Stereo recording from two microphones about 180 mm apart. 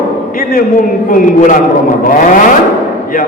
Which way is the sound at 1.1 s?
45° left (ahead or behind).